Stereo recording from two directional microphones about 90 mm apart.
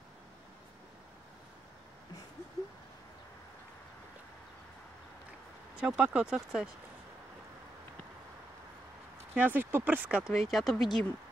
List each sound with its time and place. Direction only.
5.8 s speech: 10° right (ahead or behind)
9.3 s speech: 20° right (ahead or behind)
10.2 s speech: centre (ahead or behind)